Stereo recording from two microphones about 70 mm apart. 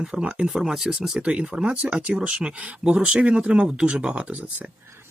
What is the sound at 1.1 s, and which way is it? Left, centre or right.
Speech, centre.